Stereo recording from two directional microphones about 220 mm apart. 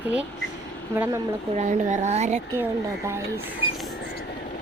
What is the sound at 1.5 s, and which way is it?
Speech, 35° right (ahead or behind).